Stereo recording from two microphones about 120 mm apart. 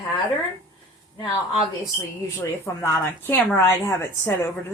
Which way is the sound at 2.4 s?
25° left (ahead or behind).